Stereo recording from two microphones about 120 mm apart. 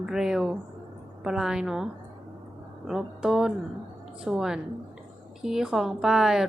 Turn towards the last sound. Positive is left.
turn(degrees=-5)  # may be behind; listen again after turning